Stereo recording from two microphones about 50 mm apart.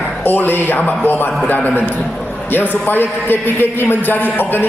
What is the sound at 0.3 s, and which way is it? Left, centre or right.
A man's voice, left.